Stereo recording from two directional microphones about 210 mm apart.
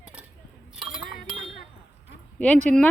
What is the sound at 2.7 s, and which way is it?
Speech, 5° left (ahead or behind).